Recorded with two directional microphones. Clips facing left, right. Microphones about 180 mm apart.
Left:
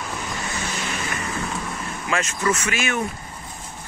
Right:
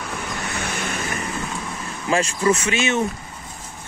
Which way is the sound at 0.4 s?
65° right (ahead or behind).